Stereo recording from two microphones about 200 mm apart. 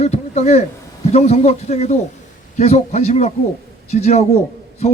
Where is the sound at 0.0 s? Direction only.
35° left (ahead or behind).